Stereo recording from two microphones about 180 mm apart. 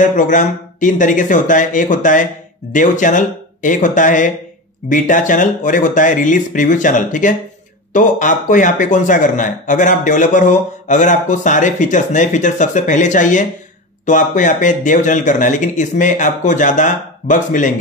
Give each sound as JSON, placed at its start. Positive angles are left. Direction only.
{"t": 0.0, "sound": "speech", "side_deg": 45}